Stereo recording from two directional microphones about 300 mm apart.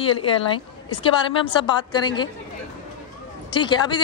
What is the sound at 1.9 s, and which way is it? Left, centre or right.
Speech, centre.